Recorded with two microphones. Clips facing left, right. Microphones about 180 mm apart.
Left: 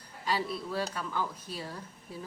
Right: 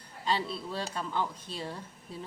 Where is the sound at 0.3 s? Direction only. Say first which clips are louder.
Even; 25° right (ahead or behind).